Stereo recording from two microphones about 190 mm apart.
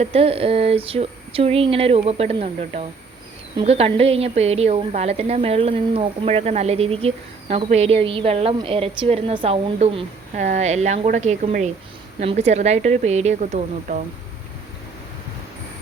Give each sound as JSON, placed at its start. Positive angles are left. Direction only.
{"t": 0.0, "sound": "a woman's voice", "side_deg": -30}